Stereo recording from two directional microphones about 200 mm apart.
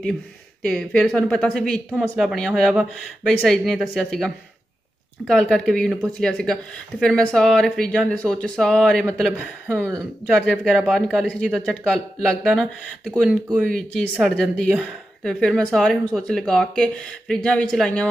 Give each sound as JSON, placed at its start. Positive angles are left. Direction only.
{"t": 0.0, "sound": "speech", "side_deg": 5}